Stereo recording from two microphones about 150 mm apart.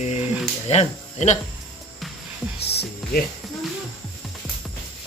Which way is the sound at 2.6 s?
90° left.